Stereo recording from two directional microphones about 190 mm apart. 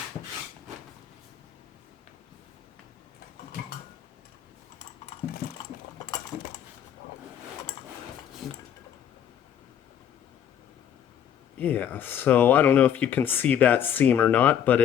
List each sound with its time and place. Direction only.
5.4 s a sound: 50° left (ahead or behind)
8.4 s dishes: centre (ahead or behind)
11.5 s speech: 10° left (ahead or behind)